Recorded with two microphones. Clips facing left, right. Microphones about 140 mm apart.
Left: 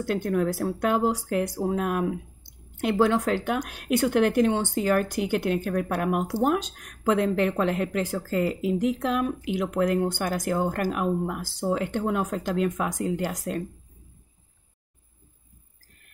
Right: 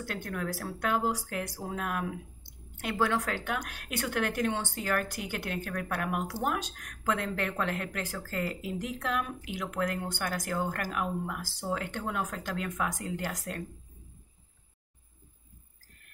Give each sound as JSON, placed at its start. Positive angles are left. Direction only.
{"t": 0.0, "sound": "speech", "side_deg": 25}